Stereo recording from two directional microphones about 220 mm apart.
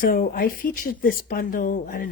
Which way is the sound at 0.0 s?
40° left (ahead or behind).